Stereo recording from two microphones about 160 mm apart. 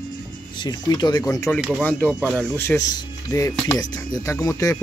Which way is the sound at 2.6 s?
15° left (ahead or behind).